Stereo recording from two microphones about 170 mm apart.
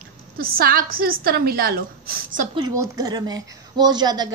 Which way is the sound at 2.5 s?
20° right (ahead or behind).